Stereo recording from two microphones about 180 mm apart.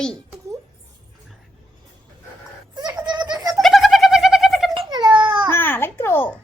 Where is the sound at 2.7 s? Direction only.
20° right (ahead or behind).